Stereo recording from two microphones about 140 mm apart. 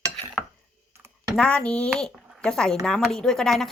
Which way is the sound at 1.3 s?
5° left (ahead or behind).